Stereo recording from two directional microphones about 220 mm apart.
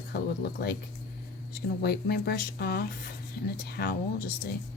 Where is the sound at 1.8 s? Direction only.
45° left (ahead or behind).